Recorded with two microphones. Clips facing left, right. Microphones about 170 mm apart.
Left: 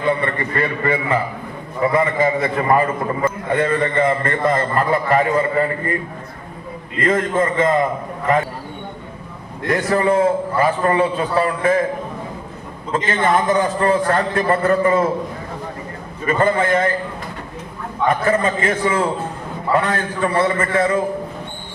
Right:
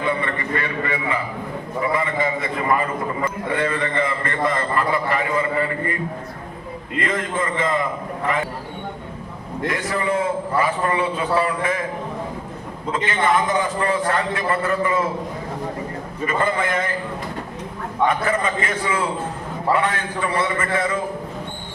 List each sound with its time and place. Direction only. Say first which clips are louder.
0.0 s a man's voice: left 4 dB; 45° left (ahead or behind)
7.0 s a man's voice: left 7 dB; 45° left (ahead or behind)
9.6 s a man's voice: left 6 dB; 45° left (ahead or behind)
12.9 s a man's voice: left 2 dB; 45° left (ahead or behind)
16.2 s a man's voice: left 5 dB; 45° left (ahead or behind)
18.7 s a man's voice: left 4 dB; 50° left (ahead or behind)